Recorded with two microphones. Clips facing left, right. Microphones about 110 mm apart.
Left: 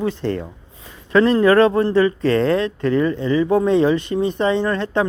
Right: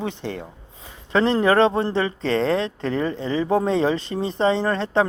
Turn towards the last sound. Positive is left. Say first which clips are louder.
# left 1 dB
turn(degrees=-30)  # may be behind; listen again after turning